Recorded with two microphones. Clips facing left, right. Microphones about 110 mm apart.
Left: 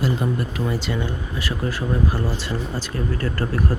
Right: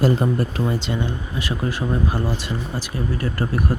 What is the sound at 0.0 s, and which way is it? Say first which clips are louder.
Speech: right 4 dB; 35° right (ahead or behind).